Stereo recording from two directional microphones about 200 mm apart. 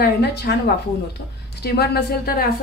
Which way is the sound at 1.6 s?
50° left (ahead or behind).